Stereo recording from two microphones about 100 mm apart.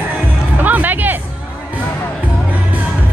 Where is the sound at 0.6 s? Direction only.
15° right (ahead or behind).